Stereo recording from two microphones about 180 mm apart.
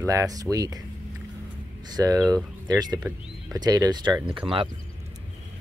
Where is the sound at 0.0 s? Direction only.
15° right (ahead or behind).